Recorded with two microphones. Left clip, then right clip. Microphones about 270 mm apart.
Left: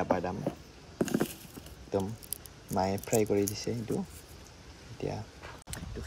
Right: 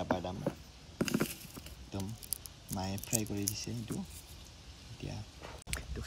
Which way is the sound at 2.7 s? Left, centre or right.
Centre.